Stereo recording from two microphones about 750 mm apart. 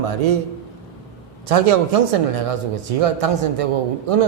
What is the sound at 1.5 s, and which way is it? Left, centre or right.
Speech, right.